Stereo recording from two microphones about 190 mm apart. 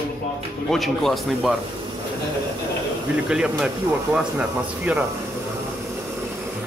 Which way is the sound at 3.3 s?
5° right (ahead or behind).